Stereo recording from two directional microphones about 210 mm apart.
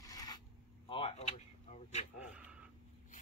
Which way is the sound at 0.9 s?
25° left (ahead or behind).